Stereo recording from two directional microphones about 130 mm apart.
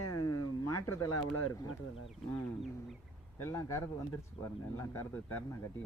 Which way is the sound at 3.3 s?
20° left (ahead or behind).